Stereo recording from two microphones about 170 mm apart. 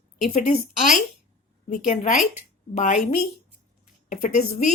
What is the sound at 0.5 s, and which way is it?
Speech, 50° left (ahead or behind).